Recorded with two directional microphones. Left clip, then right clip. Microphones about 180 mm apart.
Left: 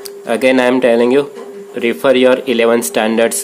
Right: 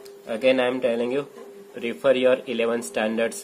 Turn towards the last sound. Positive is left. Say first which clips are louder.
# left 11 dB
turn(degrees=25)  # may be behind; listen again after turning